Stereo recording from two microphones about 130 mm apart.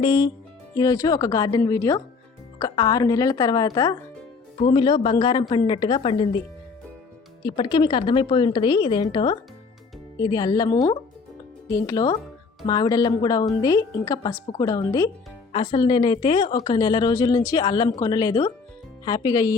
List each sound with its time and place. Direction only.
0.0 s a woman's voice: 35° left (ahead or behind)
4.7 s a woman's voice: 40° left (ahead or behind)
7.4 s a woman's voice: 40° left (ahead or behind)